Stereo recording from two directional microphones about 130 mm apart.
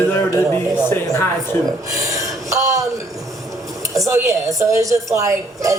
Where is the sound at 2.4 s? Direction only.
25° right (ahead or behind).